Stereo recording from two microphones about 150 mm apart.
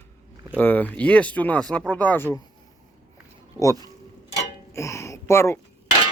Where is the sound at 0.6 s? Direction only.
10° left (ahead or behind).